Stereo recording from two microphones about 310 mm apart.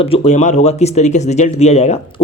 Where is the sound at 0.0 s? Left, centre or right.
Centre.